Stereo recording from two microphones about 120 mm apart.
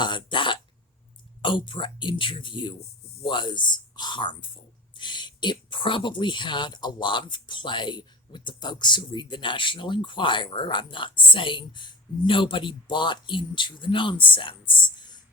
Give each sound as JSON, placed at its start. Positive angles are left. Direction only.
{"t": 0.0, "sound": "throat clearing", "side_deg": 40}
{"t": 1.4, "sound": "a man's voice", "side_deg": 45}